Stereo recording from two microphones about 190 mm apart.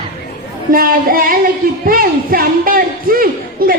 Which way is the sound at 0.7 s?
50° right (ahead or behind).